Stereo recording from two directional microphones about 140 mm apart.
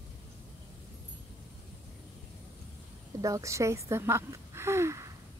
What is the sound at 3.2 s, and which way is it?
A woman's voice, 20° right (ahead or behind).